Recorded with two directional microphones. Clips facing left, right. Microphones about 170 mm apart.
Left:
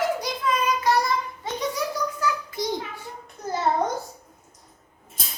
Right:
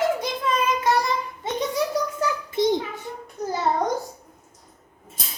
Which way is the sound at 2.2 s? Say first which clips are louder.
Right 4 dB; 25° right (ahead or behind).